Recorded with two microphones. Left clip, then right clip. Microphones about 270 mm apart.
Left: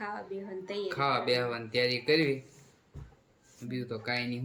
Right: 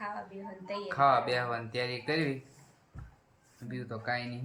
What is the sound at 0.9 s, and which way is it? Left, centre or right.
Speech, centre.